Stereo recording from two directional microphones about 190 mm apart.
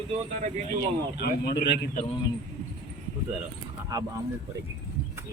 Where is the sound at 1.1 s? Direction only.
55° left (ahead or behind).